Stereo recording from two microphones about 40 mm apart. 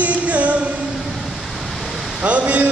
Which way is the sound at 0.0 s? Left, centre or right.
Right.